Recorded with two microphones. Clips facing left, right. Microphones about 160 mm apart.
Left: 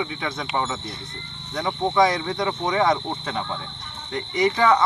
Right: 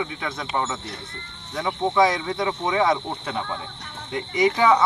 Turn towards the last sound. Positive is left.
turn(degrees=-5)  # may be behind; listen again after turning